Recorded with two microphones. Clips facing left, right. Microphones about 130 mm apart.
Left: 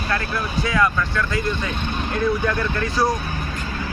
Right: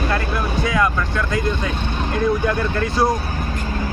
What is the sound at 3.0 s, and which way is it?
Speech, 25° right (ahead or behind).